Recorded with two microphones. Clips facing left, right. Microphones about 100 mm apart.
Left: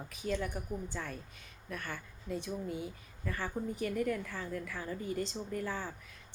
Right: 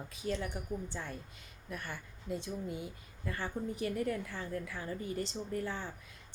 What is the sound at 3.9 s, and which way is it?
A woman's voice, 25° right (ahead or behind).